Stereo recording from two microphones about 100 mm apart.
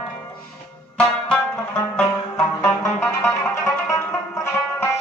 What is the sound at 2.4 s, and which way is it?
Music, 30° left (ahead or behind).